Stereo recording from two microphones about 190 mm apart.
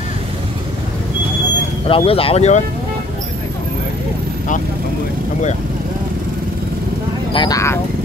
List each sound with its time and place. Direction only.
1.9 s speech: 30° left (ahead or behind)
7.3 s speech: 20° left (ahead or behind)